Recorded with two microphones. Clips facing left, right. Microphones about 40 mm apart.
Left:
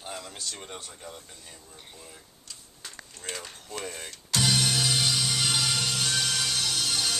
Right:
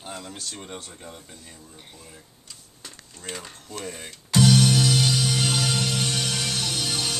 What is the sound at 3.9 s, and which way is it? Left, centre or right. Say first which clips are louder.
Music: right 2 dB; centre.